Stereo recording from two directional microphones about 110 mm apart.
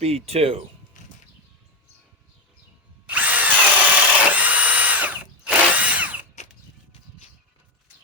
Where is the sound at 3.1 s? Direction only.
15° right (ahead or behind).